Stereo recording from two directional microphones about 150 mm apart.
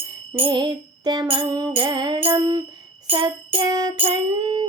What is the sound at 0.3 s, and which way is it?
Music, 30° right (ahead or behind).